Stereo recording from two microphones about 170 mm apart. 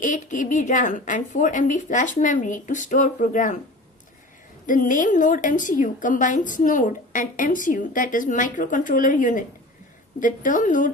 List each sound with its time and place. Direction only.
0.0 s a woman's voice: 50° left (ahead or behind)
4.6 s a woman's voice: 50° left (ahead or behind)